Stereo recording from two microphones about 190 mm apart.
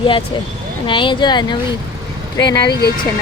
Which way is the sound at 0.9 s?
25° left (ahead or behind).